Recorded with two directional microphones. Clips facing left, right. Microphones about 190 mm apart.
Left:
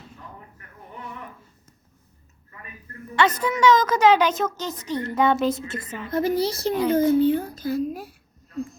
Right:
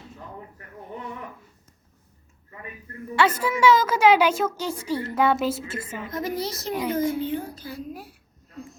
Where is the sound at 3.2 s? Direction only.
5° right (ahead or behind).